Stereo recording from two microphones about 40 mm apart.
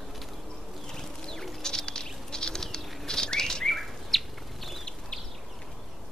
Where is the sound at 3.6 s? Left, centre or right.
Centre.